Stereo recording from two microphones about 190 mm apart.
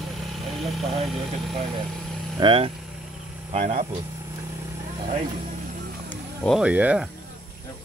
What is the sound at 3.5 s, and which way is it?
Speech, 35° right (ahead or behind).